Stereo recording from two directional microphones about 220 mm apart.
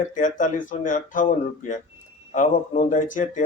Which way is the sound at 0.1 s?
35° left (ahead or behind).